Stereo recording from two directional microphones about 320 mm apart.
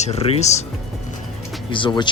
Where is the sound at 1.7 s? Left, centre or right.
Centre.